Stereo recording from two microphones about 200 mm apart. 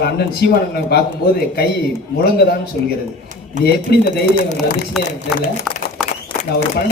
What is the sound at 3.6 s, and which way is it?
Speech, 50° left (ahead or behind).